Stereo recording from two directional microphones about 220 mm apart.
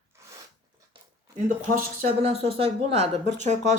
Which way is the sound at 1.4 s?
30° right (ahead or behind).